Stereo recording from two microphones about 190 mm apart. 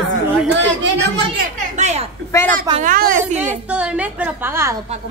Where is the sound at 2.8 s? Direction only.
45° right (ahead or behind).